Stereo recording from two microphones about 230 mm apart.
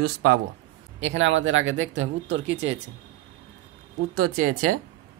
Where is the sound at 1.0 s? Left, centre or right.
Right.